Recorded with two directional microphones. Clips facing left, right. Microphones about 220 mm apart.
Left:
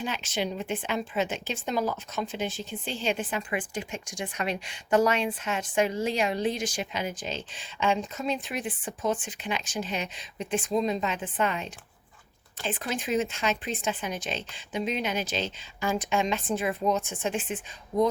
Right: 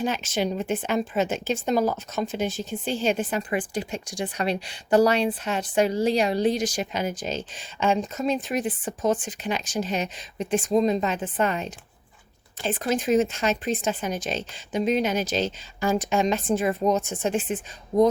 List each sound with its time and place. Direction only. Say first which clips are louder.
0.0 s speech: right 5 dB; 40° right (ahead or behind)